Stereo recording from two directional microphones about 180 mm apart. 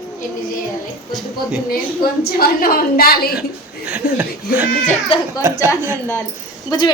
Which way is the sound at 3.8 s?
10° right (ahead or behind).